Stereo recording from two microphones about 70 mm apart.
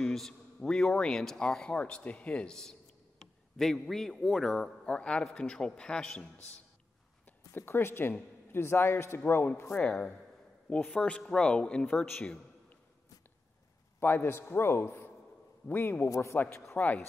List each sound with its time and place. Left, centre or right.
0.0 s speech: centre
1.7 s speech: centre
7.5 s a man's voice: left
9.7 s speech: centre
13.9 s a man's voice: left
16.1 s a man's voice: left
16.7 s a man's voice: left